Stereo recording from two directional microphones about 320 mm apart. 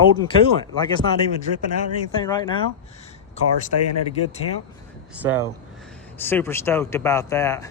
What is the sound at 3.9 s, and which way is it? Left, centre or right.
Speech, left.